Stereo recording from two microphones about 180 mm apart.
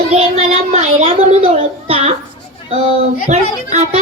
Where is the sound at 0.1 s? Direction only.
35° right (ahead or behind).